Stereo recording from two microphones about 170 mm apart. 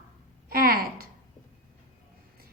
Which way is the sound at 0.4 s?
60° right (ahead or behind).